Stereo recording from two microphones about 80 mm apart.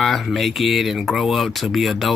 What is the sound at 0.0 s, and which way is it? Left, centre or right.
Speech, centre.